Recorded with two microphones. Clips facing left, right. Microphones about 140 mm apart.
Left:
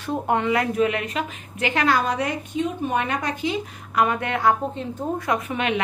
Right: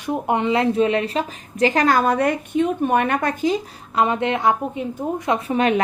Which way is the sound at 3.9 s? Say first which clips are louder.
Right 3 dB; 25° right (ahead or behind).